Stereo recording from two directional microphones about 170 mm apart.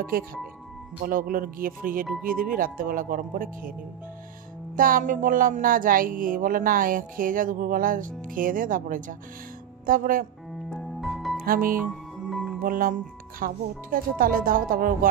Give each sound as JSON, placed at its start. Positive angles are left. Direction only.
{"t": 1.0, "sound": "speech", "side_deg": -55}
{"t": 4.7, "sound": "music", "side_deg": -55}
{"t": 9.8, "sound": "speech", "side_deg": -55}
{"t": 10.7, "sound": "music", "side_deg": 0}
{"t": 11.4, "sound": "speech", "side_deg": -60}
{"t": 12.3, "sound": "music", "side_deg": 0}
{"t": 12.6, "sound": "speech", "side_deg": -55}